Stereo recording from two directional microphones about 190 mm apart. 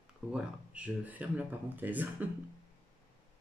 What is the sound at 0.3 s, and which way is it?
Speech, 5° right (ahead or behind).